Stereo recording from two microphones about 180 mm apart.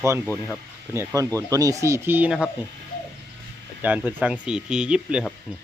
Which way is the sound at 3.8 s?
10° right (ahead or behind).